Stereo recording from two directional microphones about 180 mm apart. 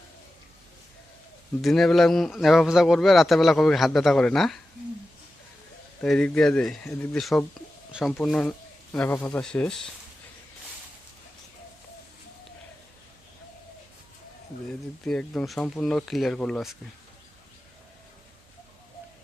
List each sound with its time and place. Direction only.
1.6 s speech: centre (ahead or behind)
6.0 s speech: 5° left (ahead or behind)
15.0 s speech: centre (ahead or behind)